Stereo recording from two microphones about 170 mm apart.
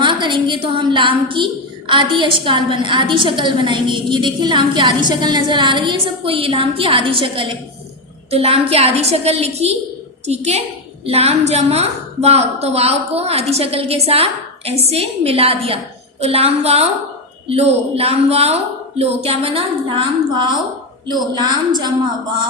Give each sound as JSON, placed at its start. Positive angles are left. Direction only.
{"t": 0.0, "sound": "a woman's voice", "side_deg": -30}